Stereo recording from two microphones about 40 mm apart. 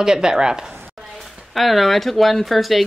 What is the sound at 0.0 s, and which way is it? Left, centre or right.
Speech, centre.